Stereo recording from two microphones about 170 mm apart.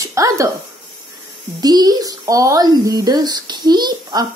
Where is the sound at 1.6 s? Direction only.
25° right (ahead or behind).